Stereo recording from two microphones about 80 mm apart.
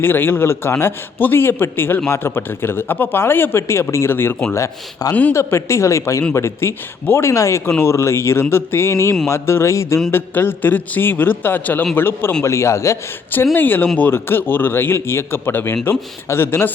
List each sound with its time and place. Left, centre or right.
0.0 s a man's voice: left
4.5 s a man's voice: left
13.3 s a man's voice: left